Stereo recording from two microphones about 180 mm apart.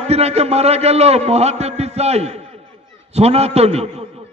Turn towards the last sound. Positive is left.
turn(degrees=-35)  # may be behind; listen again after turning